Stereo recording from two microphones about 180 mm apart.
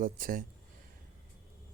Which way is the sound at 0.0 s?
50° right (ahead or behind).